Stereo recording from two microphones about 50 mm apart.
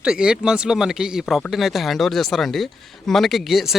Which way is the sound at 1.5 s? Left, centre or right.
Centre.